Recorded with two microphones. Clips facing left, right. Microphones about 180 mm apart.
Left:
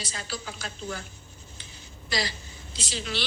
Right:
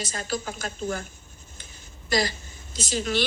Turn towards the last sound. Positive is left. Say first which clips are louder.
# right 7 dB
turn(degrees=-45)  # may be behind; listen again after turning